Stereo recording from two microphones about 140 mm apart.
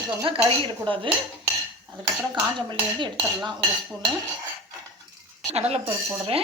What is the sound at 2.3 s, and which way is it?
Dishes, 35° right (ahead or behind).